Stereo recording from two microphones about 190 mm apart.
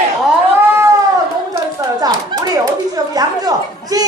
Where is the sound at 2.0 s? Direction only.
20° right (ahead or behind).